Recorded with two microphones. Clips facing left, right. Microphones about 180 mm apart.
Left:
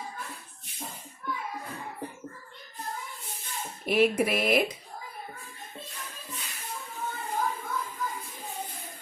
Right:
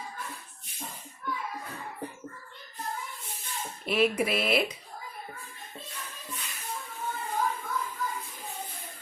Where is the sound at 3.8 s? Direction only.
50° left (ahead or behind).